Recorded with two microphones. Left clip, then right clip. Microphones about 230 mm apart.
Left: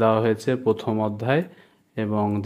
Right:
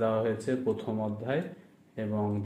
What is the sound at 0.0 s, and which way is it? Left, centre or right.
Speech, left.